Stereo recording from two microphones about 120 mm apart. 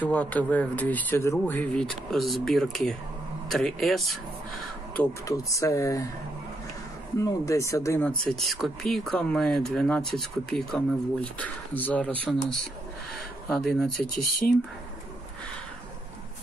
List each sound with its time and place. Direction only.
0.0 s speech: 10° left (ahead or behind)
5.0 s speech: 10° left (ahead or behind)
5.5 s speech: 25° left (ahead or behind)
7.2 s speech: 25° left (ahead or behind)
8.3 s speech: centre (ahead or behind)